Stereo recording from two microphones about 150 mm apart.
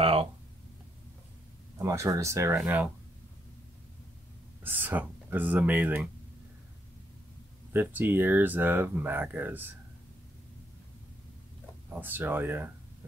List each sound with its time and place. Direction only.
0.0 s a sound: 40° right (ahead or behind)
1.8 s speech: 20° right (ahead or behind)
2.6 s speech: 10° right (ahead or behind)
4.6 s speech: 10° right (ahead or behind)
7.7 s speech: 15° right (ahead or behind)
11.9 s speech: 15° right (ahead or behind)